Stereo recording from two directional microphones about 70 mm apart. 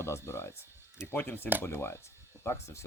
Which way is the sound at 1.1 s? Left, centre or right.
Left.